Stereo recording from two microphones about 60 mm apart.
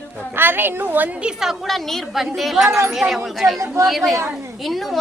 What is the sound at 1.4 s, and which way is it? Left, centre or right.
A woman's voice, centre.